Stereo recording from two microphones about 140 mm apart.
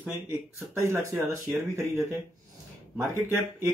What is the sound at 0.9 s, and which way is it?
Speech, 20° right (ahead or behind).